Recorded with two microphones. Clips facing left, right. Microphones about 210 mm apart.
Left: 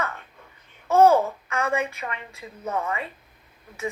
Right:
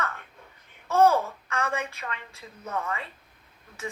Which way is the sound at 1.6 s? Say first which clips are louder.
Left 5 dB; 15° left (ahead or behind).